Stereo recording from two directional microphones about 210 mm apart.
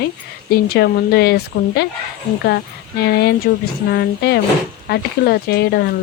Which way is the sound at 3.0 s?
50° left (ahead or behind).